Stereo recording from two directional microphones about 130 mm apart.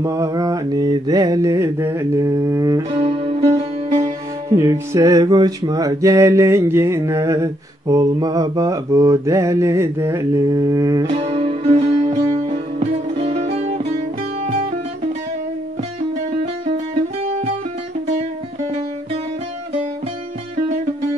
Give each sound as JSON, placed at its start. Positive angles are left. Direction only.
{"t": 0.0, "sound": "music", "side_deg": -25}
{"t": 2.9, "sound": "music", "side_deg": -45}
{"t": 4.6, "sound": "music", "side_deg": -25}
{"t": 11.1, "sound": "music", "side_deg": -50}
{"t": 12.4, "sound": "music", "side_deg": -55}